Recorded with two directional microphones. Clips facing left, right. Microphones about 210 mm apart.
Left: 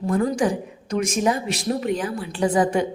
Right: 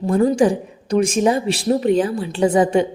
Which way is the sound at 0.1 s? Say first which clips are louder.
Right 6 dB; 30° right (ahead or behind).